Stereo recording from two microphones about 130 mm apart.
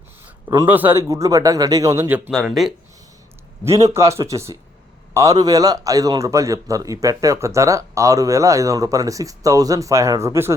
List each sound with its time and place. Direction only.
0.4 s a man's voice: 25° right (ahead or behind)
2.3 s speech: centre (ahead or behind)
3.6 s a man's voice: 25° right (ahead or behind)